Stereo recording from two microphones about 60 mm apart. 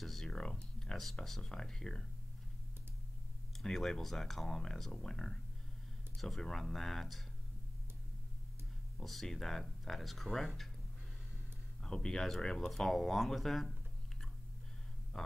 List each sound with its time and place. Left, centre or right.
0.0 s speech: centre
3.6 s speech: centre
8.9 s speech: centre
11.8 s speech: centre
15.2 s a sound: centre